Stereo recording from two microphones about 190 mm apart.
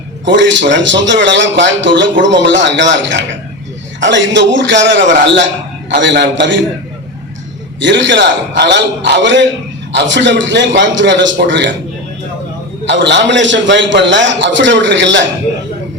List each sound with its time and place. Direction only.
0.3 s a man's voice: 70° right (ahead or behind)
7.8 s a man's voice: 70° right (ahead or behind)
12.9 s a man's voice: 65° right (ahead or behind)